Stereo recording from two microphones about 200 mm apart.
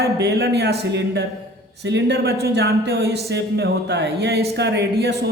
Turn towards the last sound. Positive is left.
turn(degrees=-55)  # may be behind; listen again after turning